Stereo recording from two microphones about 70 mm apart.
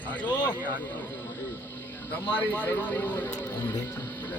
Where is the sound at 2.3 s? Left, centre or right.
Left.